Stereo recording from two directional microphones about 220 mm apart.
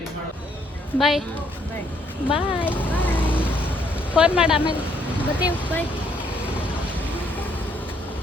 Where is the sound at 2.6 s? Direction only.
10° left (ahead or behind).